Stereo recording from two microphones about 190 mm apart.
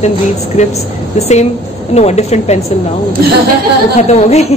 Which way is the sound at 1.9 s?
35° left (ahead or behind).